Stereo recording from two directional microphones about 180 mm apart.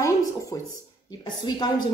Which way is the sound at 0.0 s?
20° left (ahead or behind).